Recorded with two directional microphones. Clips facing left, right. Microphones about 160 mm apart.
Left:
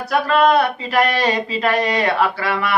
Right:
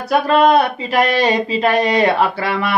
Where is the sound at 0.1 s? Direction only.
20° right (ahead or behind).